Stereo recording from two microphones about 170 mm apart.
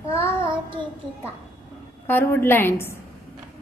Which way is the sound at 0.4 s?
30° right (ahead or behind).